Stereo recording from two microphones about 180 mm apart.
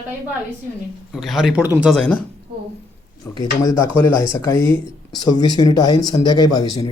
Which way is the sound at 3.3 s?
20° left (ahead or behind).